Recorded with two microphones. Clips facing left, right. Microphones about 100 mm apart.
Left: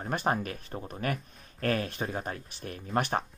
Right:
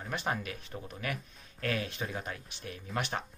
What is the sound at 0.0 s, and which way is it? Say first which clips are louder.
Speech: left 5 dB; 45° left (ahead or behind).